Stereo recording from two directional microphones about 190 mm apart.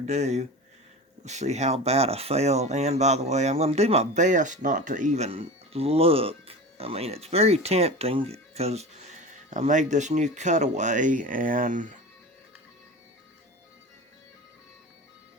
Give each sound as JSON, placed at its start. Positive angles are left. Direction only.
{"t": 0.0, "sound": "speech", "side_deg": -35}